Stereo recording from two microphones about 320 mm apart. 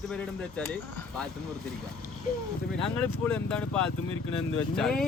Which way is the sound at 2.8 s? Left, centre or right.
Centre.